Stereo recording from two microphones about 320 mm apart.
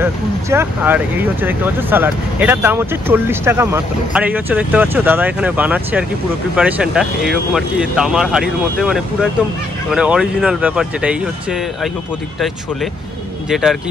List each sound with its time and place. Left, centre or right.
0.0 s speech: centre
13.5 s speech: centre